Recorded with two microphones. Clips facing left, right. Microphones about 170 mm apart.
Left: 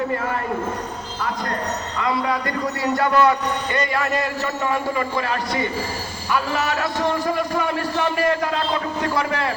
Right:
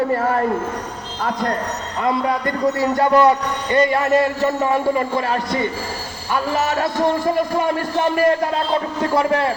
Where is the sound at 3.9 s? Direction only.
40° right (ahead or behind).